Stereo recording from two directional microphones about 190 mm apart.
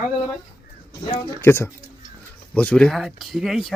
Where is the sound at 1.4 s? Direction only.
10° left (ahead or behind).